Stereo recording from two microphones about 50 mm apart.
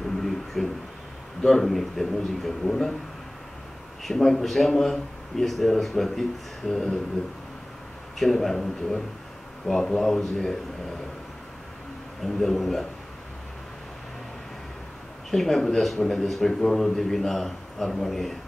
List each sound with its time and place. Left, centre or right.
0.6 s a man's voice: centre
4.0 s a man's voice: centre
8.2 s a man's voice: centre
12.2 s a man's voice: centre
15.3 s a man's voice: centre